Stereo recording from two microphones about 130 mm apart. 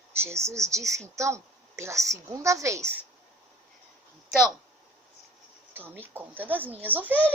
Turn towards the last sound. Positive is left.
turn(degrees=-15)  # may be behind; listen again after turning